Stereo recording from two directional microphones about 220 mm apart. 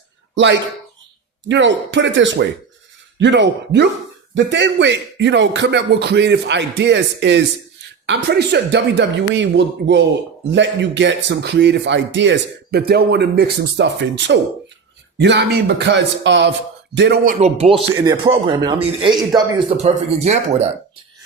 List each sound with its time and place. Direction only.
0.3 s a man's voice: 55° right (ahead or behind)
17.2 s speech: 30° right (ahead or behind)
17.9 s speech: 15° right (ahead or behind)